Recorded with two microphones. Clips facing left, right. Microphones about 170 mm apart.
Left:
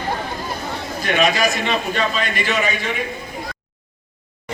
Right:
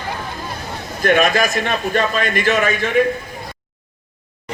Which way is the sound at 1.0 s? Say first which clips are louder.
Right 3 dB; 50° right (ahead or behind).